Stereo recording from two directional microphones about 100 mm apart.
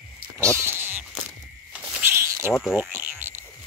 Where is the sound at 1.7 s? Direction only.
20° right (ahead or behind).